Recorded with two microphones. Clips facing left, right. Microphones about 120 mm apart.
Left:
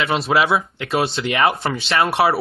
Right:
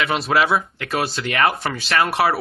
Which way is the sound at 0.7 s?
25° left (ahead or behind).